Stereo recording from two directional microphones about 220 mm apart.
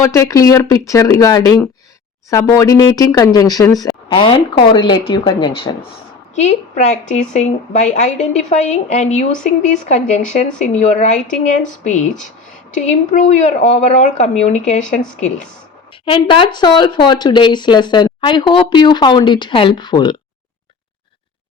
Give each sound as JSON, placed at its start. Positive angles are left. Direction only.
{"t": 0.0, "sound": "speech", "side_deg": 15}
{"t": 7.2, "sound": "speech", "side_deg": 35}
{"t": 16.0, "sound": "speech", "side_deg": 25}